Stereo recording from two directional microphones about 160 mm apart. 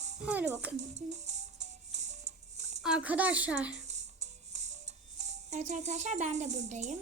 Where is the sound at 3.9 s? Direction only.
45° right (ahead or behind).